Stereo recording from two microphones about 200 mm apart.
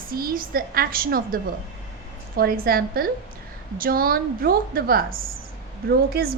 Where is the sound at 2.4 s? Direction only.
50° right (ahead or behind).